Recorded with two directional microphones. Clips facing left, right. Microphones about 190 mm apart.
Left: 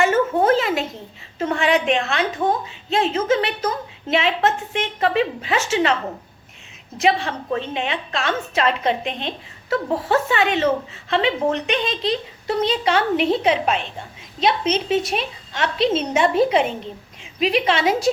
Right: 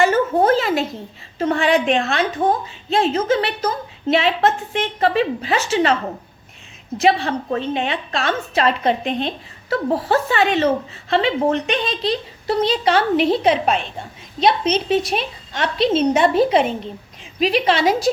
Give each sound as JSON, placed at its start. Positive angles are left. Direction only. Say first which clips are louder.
{"t": 0.0, "sound": "a sound", "louder": "right 2 dB", "side_deg": -35}
{"t": 1.4, "sound": "a woman's voice", "louder": "right 2 dB", "side_deg": -35}
{"t": 7.0, "sound": "a woman's voice", "louder": "right 3 dB", "side_deg": -40}